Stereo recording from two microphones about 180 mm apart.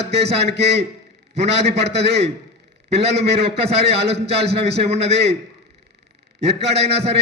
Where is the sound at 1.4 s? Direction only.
35° right (ahead or behind).